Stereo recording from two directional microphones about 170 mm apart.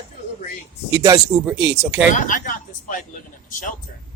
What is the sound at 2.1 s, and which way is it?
Speech, 50° left (ahead or behind).